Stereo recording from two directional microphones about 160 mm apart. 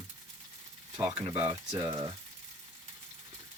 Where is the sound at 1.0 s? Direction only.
15° right (ahead or behind).